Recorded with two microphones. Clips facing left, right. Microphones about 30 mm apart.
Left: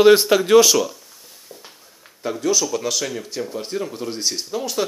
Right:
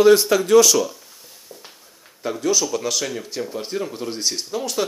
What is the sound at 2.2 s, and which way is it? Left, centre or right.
Speech, centre.